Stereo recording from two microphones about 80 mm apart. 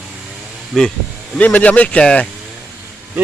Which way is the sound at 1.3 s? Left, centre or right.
Centre.